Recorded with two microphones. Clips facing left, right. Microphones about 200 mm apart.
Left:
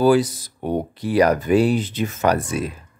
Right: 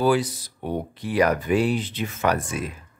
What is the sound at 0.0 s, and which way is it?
Speech, 40° left (ahead or behind).